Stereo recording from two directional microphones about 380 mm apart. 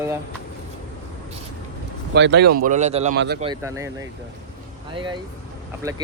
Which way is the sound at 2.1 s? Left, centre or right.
Right.